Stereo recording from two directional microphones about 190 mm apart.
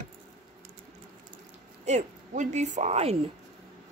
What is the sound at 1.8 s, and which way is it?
A woman's voice, 40° right (ahead or behind).